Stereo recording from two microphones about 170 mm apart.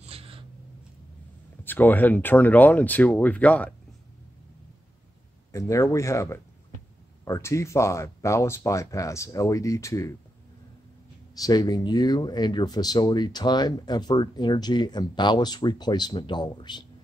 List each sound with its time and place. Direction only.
0.0 s a sound: 35° right (ahead or behind)
1.6 s speech: 10° left (ahead or behind)
5.5 s speech: 20° left (ahead or behind)
11.3 s speech: 20° left (ahead or behind)